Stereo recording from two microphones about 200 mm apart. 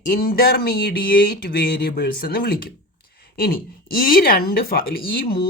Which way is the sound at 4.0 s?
45° left (ahead or behind).